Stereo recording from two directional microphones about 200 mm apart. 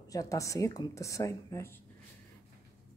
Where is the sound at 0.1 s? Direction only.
15° left (ahead or behind).